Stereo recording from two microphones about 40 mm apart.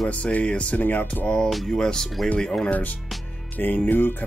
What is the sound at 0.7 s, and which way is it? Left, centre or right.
Music, left.